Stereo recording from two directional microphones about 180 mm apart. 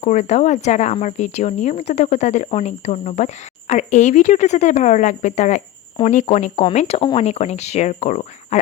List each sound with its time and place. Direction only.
0.0 s speech: 40° left (ahead or behind)